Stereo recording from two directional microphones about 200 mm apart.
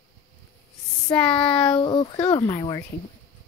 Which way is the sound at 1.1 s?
5° left (ahead or behind).